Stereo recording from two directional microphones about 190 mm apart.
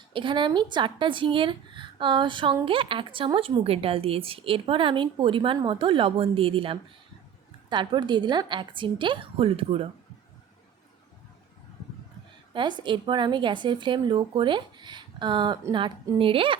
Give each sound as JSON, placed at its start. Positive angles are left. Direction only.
{"t": 0.1, "sound": "speech", "side_deg": -25}
{"t": 12.5, "sound": "speech", "side_deg": -25}